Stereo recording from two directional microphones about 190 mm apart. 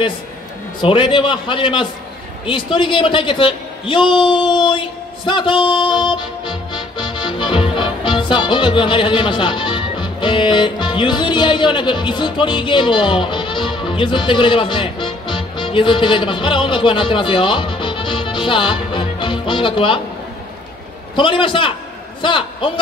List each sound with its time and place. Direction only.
0.7 s a man's voice: 25° left (ahead or behind)
21.2 s a man's voice: 25° left (ahead or behind)